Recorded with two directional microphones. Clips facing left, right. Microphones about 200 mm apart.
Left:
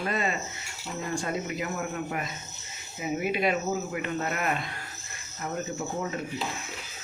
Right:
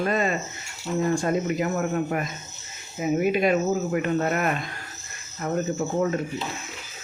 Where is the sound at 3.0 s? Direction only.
45° right (ahead or behind).